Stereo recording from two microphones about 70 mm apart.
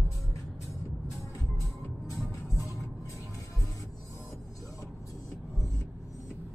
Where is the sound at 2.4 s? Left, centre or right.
Left.